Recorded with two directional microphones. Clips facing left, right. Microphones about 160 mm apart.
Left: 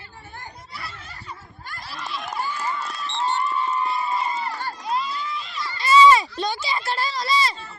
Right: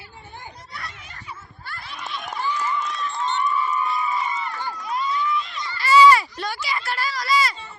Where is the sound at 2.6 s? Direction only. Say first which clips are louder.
Right 3 dB; 35° left (ahead or behind).